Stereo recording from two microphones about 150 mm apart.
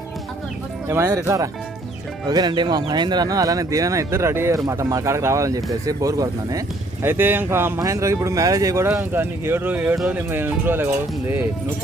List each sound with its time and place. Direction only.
0.9 s speech: 20° right (ahead or behind)